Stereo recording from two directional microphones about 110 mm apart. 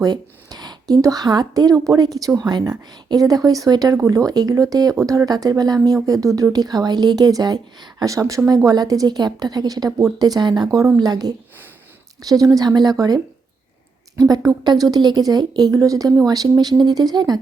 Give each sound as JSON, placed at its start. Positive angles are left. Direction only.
{"t": 0.0, "sound": "speech", "side_deg": -35}